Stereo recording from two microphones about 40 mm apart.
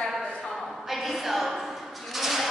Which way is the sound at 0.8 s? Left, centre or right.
Centre.